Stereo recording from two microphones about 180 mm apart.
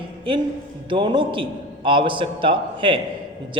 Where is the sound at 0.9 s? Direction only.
25° right (ahead or behind).